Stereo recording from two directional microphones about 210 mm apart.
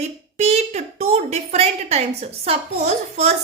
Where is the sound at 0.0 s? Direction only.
30° right (ahead or behind).